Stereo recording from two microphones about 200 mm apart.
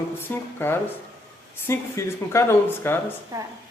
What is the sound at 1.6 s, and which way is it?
A man's voice, 10° left (ahead or behind).